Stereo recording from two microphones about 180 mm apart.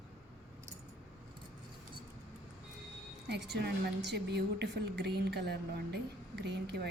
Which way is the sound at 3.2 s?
70° right (ahead or behind).